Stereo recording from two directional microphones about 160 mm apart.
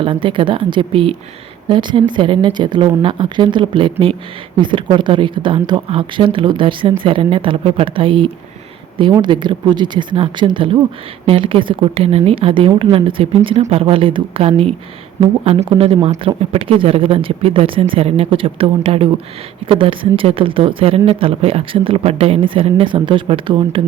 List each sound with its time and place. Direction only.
0.0 s a woman's voice: 30° right (ahead or behind)